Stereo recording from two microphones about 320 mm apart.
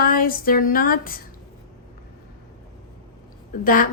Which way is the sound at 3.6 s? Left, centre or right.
Left.